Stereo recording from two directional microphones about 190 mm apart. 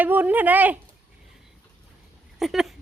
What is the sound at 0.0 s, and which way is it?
Speech, 10° right (ahead or behind).